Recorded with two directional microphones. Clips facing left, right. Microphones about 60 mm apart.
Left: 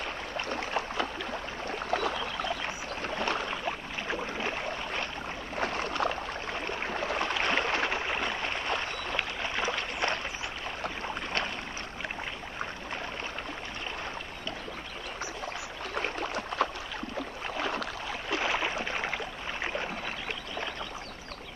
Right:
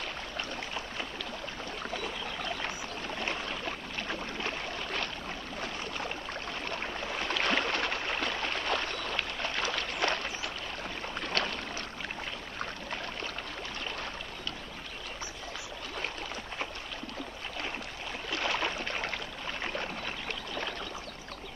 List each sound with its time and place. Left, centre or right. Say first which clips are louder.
0.5 s a sound: left 6 dB; left
1.9 s boat: left 9 dB; left
3.6 s boat: left 3 dB; centre
5.6 s boat: left 9 dB; left
7.3 s a sound: right 1 dB; centre
11.1 s boat: right 3 dB; centre
15.9 s boat: left 6 dB; left
17.6 s boat: left 7 dB; left
18.3 s boat: left 2 dB; centre